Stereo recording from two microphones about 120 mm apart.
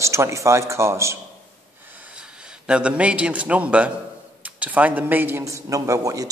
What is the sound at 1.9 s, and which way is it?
A man's voice, 10° right (ahead or behind).